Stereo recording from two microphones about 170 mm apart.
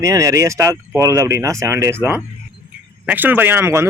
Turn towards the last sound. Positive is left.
turn(degrees=-15)  # may be behind; listen again after turning